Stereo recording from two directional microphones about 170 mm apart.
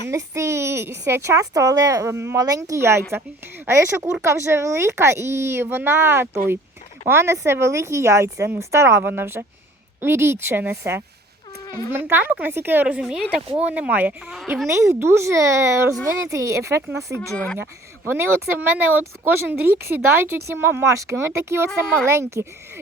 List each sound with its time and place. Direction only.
0.1 s a child's voice: 15° right (ahead or behind)
11.6 s a sound: 25° left (ahead or behind)
11.9 s a child's voice: 15° right (ahead or behind)
17.2 s speech: 5° left (ahead or behind)
18.1 s a child's voice: 10° right (ahead or behind)
21.7 s speech: 5° left (ahead or behind)
22.0 s a child's voice: 15° right (ahead or behind)